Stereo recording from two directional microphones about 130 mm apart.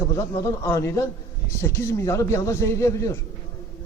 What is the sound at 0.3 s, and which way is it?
A man's voice, 25° left (ahead or behind).